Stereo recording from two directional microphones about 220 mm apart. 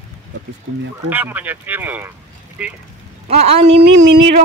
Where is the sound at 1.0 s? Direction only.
10° right (ahead or behind).